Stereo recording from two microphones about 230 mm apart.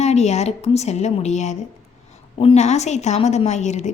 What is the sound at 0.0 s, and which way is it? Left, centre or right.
A woman's voice, left.